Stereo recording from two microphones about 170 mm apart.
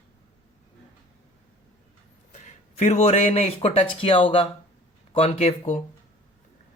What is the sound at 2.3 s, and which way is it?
Speech, 45° left (ahead or behind).